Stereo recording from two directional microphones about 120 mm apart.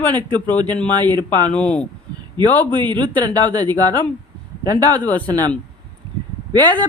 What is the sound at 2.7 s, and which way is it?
Speech, 40° right (ahead or behind).